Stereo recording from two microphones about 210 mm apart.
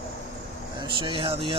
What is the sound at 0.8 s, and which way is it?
Speech, 25° right (ahead or behind).